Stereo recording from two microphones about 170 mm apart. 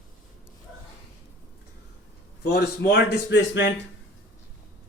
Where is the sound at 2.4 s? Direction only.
75° left (ahead or behind); by 3.8 s 90° left.